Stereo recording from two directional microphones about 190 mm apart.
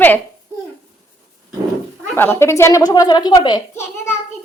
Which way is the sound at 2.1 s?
10° left (ahead or behind).